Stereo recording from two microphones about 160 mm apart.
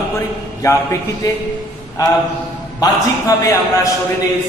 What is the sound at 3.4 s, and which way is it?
Speech, 20° left (ahead or behind).